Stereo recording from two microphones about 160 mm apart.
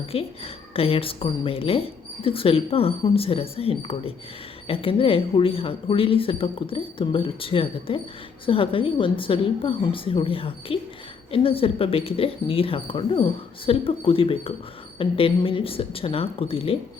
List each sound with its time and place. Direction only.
0.1 s speech: 35° left (ahead or behind)